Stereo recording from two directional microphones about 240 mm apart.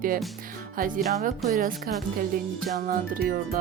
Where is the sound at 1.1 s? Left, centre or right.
Right.